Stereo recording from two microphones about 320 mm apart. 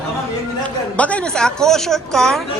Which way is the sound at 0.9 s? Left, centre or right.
Centre.